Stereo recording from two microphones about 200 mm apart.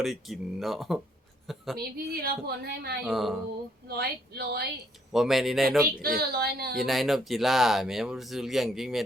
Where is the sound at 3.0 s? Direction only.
Centre (ahead or behind).